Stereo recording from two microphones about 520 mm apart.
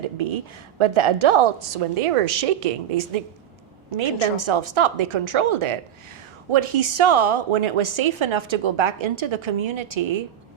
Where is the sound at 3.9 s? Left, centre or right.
Right.